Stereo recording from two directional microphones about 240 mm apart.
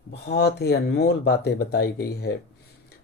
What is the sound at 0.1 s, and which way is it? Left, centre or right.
Speech, left.